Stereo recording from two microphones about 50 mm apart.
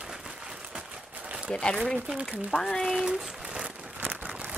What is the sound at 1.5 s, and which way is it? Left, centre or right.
A woman's voice, centre.